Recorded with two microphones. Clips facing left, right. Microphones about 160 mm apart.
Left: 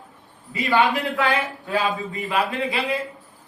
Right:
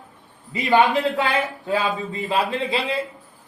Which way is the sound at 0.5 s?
20° right (ahead or behind).